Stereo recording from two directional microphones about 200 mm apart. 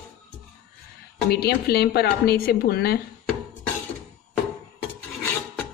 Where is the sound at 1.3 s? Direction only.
55° left (ahead or behind).